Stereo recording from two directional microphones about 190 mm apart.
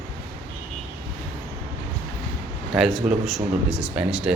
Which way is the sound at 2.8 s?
Centre (ahead or behind).